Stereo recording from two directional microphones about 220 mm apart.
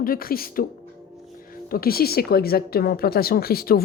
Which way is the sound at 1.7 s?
45° left (ahead or behind).